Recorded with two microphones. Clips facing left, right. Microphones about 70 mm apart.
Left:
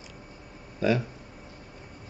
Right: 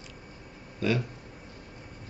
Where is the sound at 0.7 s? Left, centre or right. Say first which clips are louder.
Left 3 dB; centre.